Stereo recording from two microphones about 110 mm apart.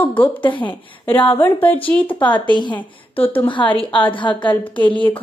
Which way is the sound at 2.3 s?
45° left (ahead or behind).